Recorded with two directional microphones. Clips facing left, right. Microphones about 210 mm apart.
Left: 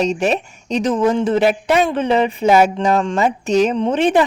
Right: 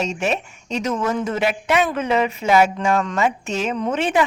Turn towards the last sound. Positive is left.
turn(degrees=35)  # may be behind; listen again after turning